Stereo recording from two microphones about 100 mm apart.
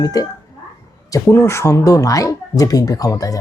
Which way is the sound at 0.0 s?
35° left (ahead or behind).